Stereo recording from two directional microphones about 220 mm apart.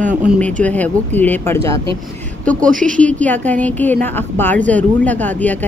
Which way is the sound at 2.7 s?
40° right (ahead or behind).